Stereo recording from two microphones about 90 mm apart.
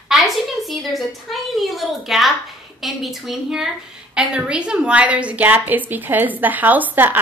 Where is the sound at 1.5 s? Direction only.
Centre (ahead or behind).